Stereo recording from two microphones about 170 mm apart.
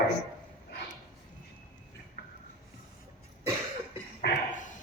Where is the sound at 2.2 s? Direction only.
65° left (ahead or behind).